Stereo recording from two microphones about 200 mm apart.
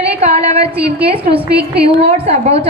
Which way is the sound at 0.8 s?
55° right (ahead or behind).